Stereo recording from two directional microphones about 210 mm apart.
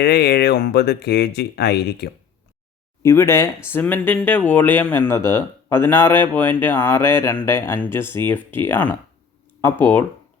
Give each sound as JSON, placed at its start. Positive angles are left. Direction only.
{"t": 0.0, "sound": "speech", "side_deg": 50}
{"t": 3.0, "sound": "speech", "side_deg": 10}